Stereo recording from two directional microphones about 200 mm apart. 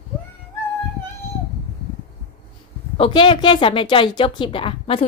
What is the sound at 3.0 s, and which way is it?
A woman's voice, 25° left (ahead or behind).